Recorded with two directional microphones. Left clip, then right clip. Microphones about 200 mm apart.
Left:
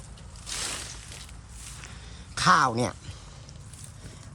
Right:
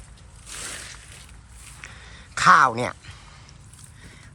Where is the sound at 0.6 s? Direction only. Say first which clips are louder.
Left 1 dB; 15° left (ahead or behind).